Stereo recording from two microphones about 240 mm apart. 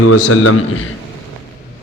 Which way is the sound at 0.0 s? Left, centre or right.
Left.